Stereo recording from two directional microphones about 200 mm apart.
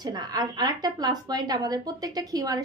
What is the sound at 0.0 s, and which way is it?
A woman's voice, 20° right (ahead or behind).